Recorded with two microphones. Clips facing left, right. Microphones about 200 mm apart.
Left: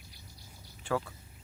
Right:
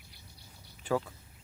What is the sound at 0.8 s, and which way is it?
Speech, 15° right (ahead or behind).